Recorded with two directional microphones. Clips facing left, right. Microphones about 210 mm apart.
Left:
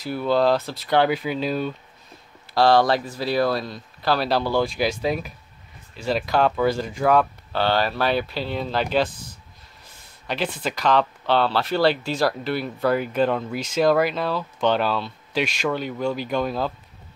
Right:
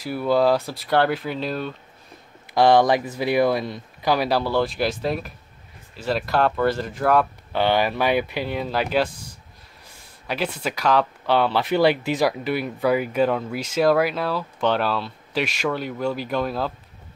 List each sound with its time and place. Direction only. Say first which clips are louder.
0.0 s speech: right 1 dB; 10° right (ahead or behind)
2.5 s speech: right 1 dB; 20° right (ahead or behind); by 7.2 s 5° right (ahead or behind)
7.5 s speech: right 2 dB; 15° right (ahead or behind)
10.2 s speech: even; 5° right (ahead or behind)